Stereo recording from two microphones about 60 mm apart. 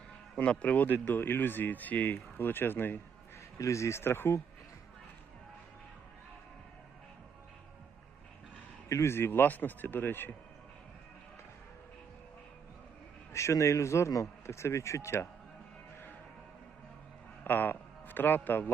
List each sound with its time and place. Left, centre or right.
0.3 s a man's voice: left
3.6 s speech: left
8.9 s a man's voice: left
13.3 s speech: left
17.4 s a man's voice: left